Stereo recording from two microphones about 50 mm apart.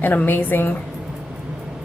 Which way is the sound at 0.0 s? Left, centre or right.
Left.